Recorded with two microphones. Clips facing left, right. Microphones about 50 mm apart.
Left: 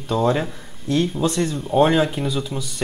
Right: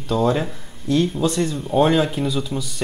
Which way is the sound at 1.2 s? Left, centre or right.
Left.